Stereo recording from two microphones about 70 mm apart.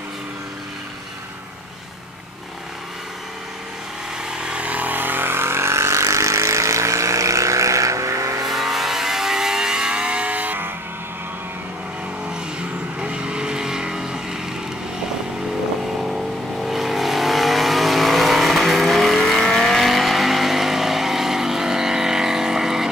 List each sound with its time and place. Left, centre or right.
4.3 s vehicle: centre; by 8.5 s right
8.5 s vehicle: centre; by 10.7 s right
12.3 s vehicle: centre
16.0 s vehicle: centre